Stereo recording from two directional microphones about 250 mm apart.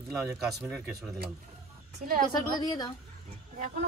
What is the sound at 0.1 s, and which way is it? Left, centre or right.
Speech, centre.